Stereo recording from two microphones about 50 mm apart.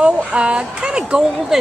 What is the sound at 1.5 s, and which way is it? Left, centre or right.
Speech, centre.